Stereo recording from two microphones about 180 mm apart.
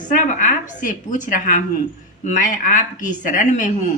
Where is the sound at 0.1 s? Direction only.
45° left (ahead or behind).